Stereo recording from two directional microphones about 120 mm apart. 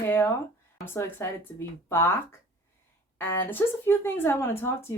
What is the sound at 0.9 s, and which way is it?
Speech, 20° left (ahead or behind).